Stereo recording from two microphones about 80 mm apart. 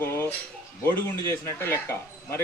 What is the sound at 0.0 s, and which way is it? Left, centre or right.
Cutlery, left.